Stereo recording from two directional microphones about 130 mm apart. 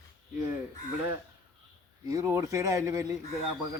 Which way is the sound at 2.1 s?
20° right (ahead or behind).